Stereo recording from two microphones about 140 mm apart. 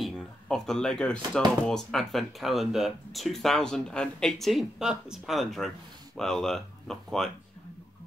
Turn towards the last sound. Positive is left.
turn(degrees=5)  # may be behind; listen again after turning